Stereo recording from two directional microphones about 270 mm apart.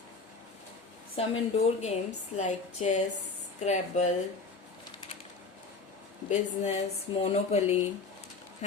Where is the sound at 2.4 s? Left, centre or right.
Left.